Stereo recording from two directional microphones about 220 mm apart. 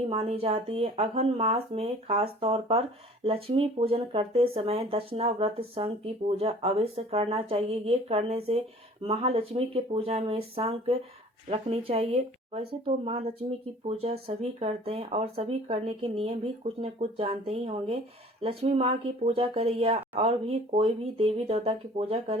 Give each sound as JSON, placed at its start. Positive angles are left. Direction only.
{"t": 0.1, "sound": "speech", "side_deg": -25}